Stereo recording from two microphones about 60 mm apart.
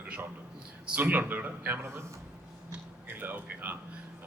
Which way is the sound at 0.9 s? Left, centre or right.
Right.